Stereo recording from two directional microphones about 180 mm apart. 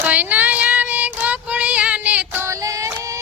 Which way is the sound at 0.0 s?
10° right (ahead or behind).